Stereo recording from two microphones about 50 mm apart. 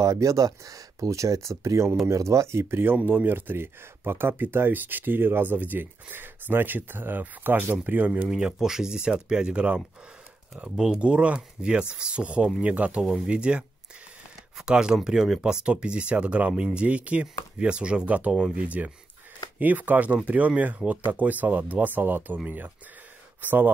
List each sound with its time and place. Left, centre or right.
0.2 s speech: right
3.0 s speech: right
8.5 s speech: centre
10.8 s speech: centre
18.3 s speech: centre
18.6 s speech: right
23.4 s speech: right